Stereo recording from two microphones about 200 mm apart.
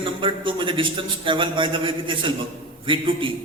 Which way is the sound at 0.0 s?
25° right (ahead or behind).